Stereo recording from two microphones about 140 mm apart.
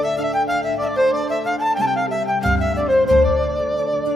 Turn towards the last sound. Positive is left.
turn(degrees=0)  # may be behind; listen again after turning